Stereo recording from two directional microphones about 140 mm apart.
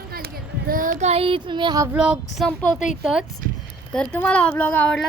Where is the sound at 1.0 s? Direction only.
45° right (ahead or behind).